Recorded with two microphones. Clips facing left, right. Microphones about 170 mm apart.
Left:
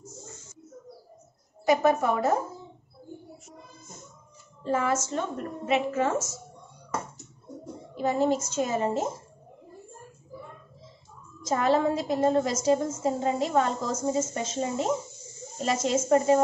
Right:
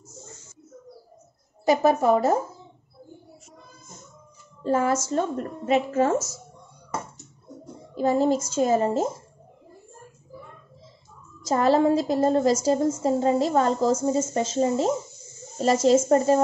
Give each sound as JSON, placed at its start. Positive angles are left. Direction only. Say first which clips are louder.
{"t": 1.7, "sound": "a woman's voice", "louder": "right 3 dB", "side_deg": -30}
{"t": 4.6, "sound": "a woman's voice", "louder": "right 4 dB", "side_deg": -40}
{"t": 7.9, "sound": "a child's voice", "louder": "right 4 dB", "side_deg": -35}
{"t": 11.4, "sound": "a woman's voice", "louder": "right 4 dB", "side_deg": -35}